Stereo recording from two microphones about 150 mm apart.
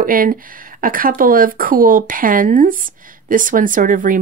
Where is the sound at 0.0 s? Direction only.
70° right (ahead or behind).